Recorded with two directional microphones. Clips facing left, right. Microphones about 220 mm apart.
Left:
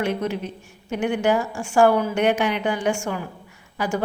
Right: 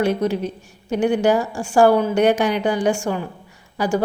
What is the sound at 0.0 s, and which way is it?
Speech, 35° right (ahead or behind).